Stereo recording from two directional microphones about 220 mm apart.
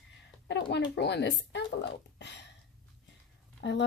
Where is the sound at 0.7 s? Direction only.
50° left (ahead or behind).